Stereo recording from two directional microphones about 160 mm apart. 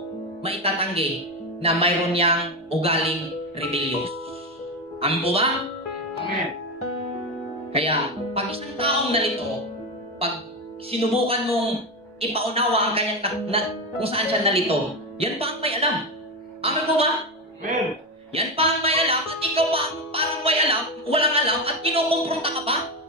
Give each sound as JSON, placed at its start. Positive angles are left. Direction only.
{"t": 0.4, "sound": "speech", "side_deg": -35}
{"t": 5.2, "sound": "speech", "side_deg": -35}
{"t": 7.7, "sound": "speech", "side_deg": -40}
{"t": 18.3, "sound": "music", "side_deg": -35}
{"t": 21.1, "sound": "speech", "side_deg": -35}